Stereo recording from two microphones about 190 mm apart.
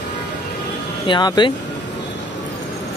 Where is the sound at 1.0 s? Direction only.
25° left (ahead or behind).